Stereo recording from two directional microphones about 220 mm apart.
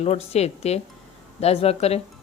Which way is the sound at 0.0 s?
30° left (ahead or behind).